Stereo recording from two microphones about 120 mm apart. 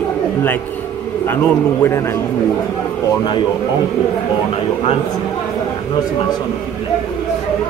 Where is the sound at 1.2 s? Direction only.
20° left (ahead or behind).